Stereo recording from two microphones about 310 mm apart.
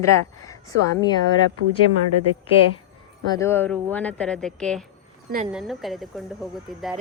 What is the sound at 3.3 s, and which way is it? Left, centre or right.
Speech, centre.